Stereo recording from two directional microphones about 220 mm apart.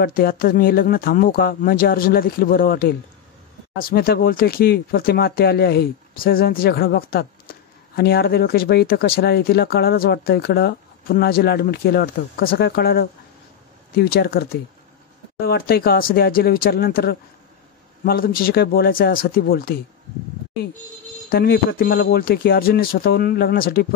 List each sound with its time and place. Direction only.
0.0 s speech: 40° left (ahead or behind)
21.3 s speech: 45° left (ahead or behind)